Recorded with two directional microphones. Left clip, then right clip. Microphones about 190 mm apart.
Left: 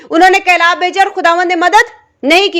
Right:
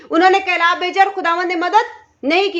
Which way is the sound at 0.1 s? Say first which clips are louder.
Left 6 dB; 25° left (ahead or behind).